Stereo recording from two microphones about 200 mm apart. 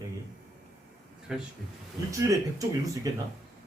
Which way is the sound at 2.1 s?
15° right (ahead or behind).